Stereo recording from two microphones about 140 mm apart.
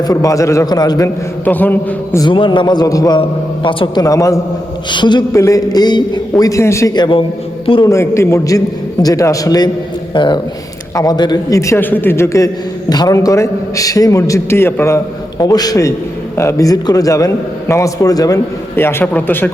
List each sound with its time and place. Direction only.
0.1 s a man's voice: 25° left (ahead or behind)
1.5 s a man's voice: 15° left (ahead or behind)
2.2 s a man's voice: 35° left (ahead or behind)
3.2 s a man's voice: 40° left (ahead or behind)
4.0 s a man's voice: 25° left (ahead or behind)
7.9 s a man's voice: 20° left (ahead or behind)